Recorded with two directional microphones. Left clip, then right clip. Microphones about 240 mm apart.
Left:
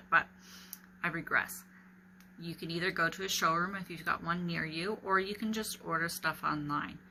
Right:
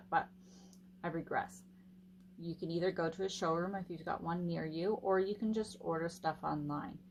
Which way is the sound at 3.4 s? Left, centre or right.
Right.